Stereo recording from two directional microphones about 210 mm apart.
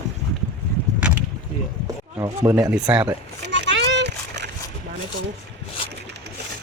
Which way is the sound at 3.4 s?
55° right (ahead or behind).